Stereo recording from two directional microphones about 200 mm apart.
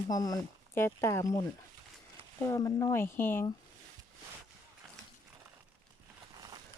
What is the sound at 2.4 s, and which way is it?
Speech, 15° left (ahead or behind).